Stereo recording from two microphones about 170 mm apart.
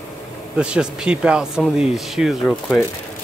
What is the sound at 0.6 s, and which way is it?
Speech, 5° right (ahead or behind).